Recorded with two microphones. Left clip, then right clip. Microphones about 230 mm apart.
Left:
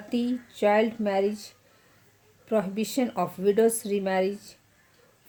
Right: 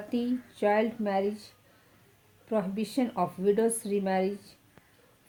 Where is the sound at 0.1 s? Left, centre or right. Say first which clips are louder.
Left 3 dB; left.